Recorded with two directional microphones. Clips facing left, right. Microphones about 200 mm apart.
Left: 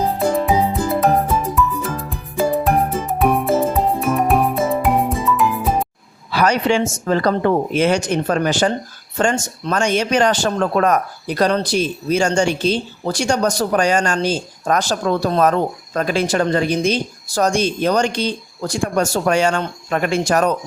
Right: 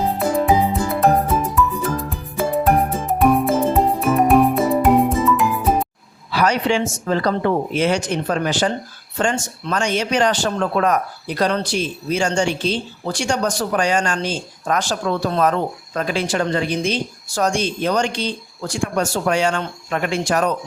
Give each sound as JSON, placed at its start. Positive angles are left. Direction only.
{"t": 0.0, "sound": "music", "side_deg": 0}
{"t": 6.3, "sound": "speech", "side_deg": 50}